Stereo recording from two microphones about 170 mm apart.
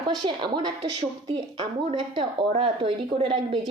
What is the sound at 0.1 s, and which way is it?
Speech, 25° right (ahead or behind).